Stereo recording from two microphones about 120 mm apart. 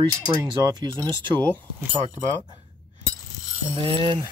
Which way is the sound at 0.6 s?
35° right (ahead or behind).